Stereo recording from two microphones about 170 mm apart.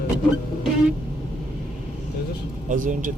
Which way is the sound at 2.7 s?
50° right (ahead or behind).